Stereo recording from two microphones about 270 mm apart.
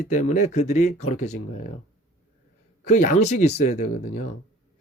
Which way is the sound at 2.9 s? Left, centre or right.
Left.